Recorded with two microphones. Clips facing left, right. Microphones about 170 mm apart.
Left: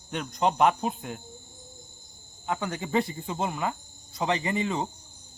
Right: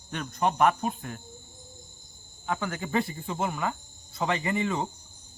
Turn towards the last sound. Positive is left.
turn(degrees=20)  # may be behind; listen again after turning